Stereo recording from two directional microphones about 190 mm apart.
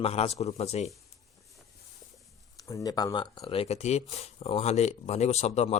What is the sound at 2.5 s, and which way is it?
Speech, 20° left (ahead or behind).